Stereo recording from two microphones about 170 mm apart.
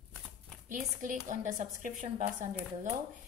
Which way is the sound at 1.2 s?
50° right (ahead or behind).